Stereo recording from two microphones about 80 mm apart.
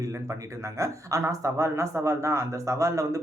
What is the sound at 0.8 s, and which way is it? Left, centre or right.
Speech, right.